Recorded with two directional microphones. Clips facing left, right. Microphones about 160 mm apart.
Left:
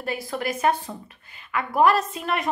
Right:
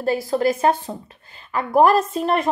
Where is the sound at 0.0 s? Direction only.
30° right (ahead or behind).